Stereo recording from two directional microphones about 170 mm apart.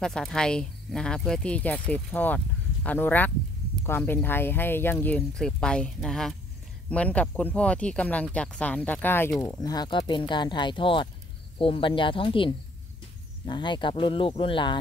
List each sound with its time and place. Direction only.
0.0 s speech: centre (ahead or behind); by 14.8 s 30° left (ahead or behind)